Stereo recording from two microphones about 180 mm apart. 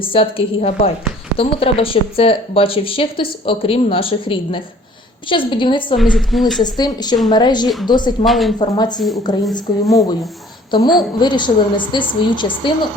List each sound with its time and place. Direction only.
0.0 s speech: 30° left (ahead or behind)
6.0 s a woman's voice: centre (ahead or behind)
6.6 s speech: 20° left (ahead or behind)
8.2 s a woman's voice: centre (ahead or behind)
8.5 s a woman's voice: 25° left (ahead or behind)